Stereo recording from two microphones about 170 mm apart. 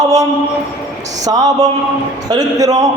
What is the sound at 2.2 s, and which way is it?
Speech, 20° right (ahead or behind).